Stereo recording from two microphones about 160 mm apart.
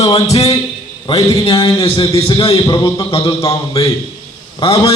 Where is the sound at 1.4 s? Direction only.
35° left (ahead or behind).